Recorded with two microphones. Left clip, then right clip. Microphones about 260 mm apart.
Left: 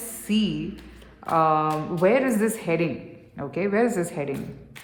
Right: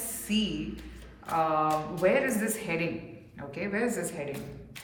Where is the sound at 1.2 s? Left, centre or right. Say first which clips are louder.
Left 6 dB; centre.